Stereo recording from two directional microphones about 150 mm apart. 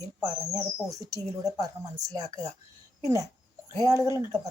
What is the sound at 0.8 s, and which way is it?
Speech, 20° right (ahead or behind).